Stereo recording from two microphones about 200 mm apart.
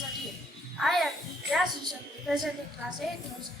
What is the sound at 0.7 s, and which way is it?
A woman's voice, centre (ahead or behind).